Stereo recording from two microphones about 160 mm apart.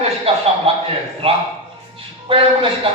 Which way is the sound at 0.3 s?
35° right (ahead or behind).